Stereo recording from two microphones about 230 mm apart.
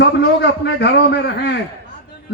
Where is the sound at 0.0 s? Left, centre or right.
Left.